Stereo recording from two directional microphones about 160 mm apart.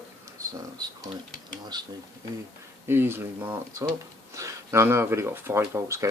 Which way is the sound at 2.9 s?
15° right (ahead or behind).